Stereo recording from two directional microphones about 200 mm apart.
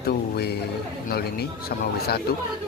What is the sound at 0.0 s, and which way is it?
Speech, 55° left (ahead or behind).